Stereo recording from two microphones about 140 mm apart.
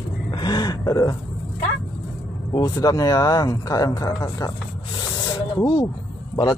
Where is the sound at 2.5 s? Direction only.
30° left (ahead or behind).